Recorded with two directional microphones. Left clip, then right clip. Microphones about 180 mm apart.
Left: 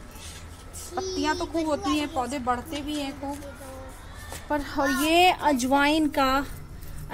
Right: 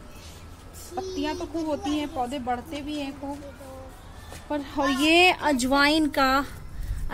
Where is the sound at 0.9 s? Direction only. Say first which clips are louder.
Left 3 dB; 5° right (ahead or behind).